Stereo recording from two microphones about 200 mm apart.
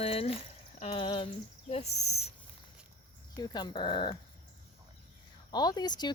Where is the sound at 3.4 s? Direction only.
20° left (ahead or behind).